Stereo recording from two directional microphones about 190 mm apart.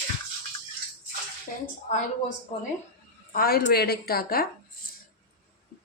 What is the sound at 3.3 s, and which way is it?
Speech, 50° left (ahead or behind).